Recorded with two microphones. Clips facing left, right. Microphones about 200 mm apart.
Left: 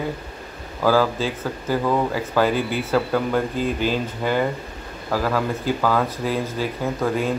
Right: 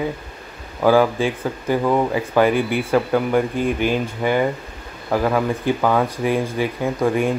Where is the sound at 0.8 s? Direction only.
15° right (ahead or behind).